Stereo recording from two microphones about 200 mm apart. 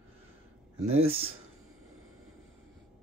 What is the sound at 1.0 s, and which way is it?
Speech, 30° right (ahead or behind).